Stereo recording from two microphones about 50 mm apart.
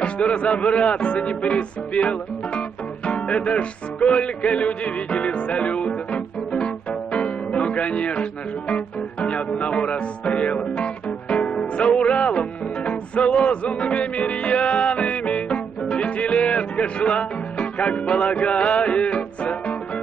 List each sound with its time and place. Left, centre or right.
0.0 s music: left
11.5 s speech: left